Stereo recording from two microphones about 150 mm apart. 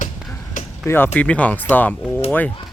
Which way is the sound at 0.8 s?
15° left (ahead or behind).